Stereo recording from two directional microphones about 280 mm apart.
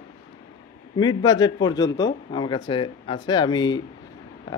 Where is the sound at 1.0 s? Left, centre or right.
Centre.